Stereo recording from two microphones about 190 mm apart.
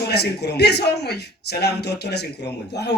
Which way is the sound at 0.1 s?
60° left (ahead or behind).